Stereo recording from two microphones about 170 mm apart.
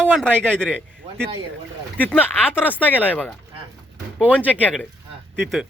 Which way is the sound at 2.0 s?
10° left (ahead or behind).